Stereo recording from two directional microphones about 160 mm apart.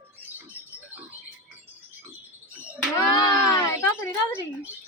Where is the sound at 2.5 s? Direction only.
10° right (ahead or behind).